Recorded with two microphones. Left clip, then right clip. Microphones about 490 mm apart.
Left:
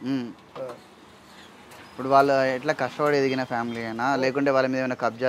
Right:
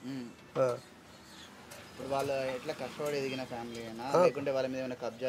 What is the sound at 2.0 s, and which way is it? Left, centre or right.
Speech, left.